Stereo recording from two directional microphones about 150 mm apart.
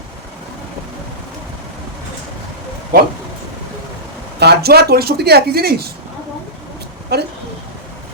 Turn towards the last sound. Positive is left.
turn(degrees=-90)